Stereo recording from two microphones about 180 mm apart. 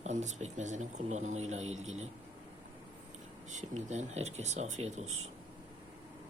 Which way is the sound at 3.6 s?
40° right (ahead or behind).